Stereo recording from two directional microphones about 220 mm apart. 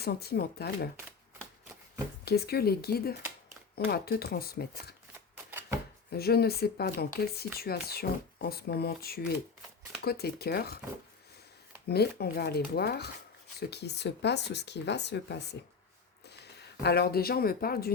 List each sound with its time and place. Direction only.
0.0 s speech: 45° left (ahead or behind)
2.2 s speech: 45° left (ahead or behind)
5.5 s chopping: 10° right (ahead or behind)
6.1 s speech: 45° left (ahead or behind)
11.9 s speech: 45° left (ahead or behind)